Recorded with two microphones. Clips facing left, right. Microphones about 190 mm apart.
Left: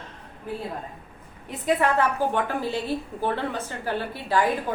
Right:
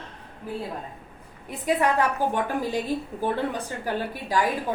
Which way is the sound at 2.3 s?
15° right (ahead or behind).